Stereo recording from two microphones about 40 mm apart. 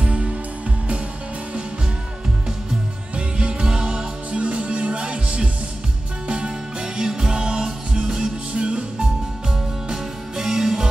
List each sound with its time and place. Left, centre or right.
0.0 s music: right
3.2 s music: right
9.8 s music: centre